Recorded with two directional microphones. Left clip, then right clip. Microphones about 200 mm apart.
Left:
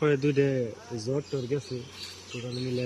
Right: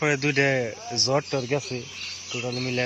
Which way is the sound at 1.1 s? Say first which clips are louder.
Right 6 dB; 30° right (ahead or behind).